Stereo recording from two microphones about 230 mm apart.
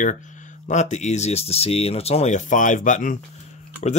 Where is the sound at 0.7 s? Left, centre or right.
Left.